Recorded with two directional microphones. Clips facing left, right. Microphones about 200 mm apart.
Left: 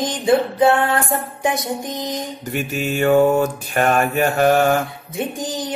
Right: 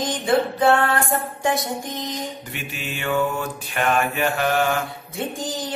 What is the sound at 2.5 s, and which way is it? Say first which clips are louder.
Mantra: left 10 dB; 45° left (ahead or behind).